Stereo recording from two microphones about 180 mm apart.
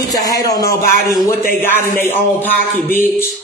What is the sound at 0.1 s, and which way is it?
Speech, 20° left (ahead or behind).